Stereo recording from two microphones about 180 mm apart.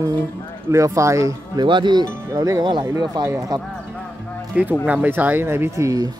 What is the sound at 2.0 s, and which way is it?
Speech, 15° right (ahead or behind).